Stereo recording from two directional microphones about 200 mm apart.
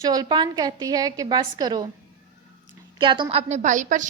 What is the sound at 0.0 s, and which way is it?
A woman's voice, 20° right (ahead or behind).